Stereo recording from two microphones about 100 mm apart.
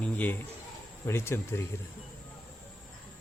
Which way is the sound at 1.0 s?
25° left (ahead or behind).